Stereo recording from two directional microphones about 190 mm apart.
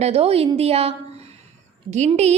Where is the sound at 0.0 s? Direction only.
30° right (ahead or behind).